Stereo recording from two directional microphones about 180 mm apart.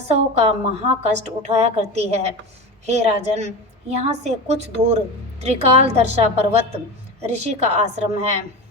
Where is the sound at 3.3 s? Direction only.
35° right (ahead or behind).